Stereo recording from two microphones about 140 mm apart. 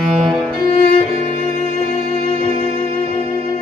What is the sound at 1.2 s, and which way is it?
Music, 55° left (ahead or behind).